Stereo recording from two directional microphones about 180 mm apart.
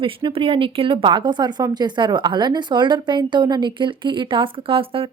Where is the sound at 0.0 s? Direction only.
30° right (ahead or behind).